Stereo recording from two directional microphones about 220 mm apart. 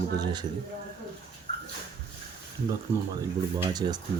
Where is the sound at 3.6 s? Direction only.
20° right (ahead or behind).